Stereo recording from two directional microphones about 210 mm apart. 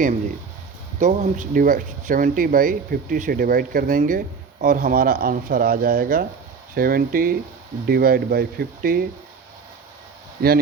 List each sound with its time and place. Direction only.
0.9 s speech: 35° right (ahead or behind)
10.4 s speech: 50° right (ahead or behind)